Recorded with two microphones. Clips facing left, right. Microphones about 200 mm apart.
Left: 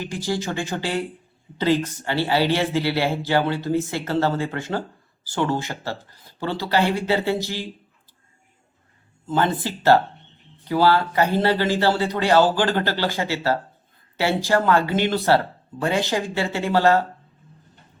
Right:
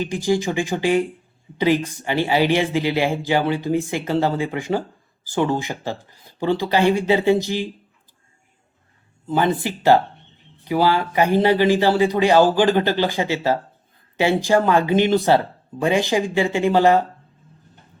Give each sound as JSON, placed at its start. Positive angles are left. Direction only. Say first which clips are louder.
{"t": 0.0, "sound": "speech", "louder": "right 6 dB", "side_deg": -15}
{"t": 9.2, "sound": "speech", "louder": "right 2 dB", "side_deg": -15}